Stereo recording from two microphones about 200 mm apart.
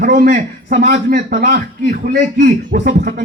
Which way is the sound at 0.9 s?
55° right (ahead or behind).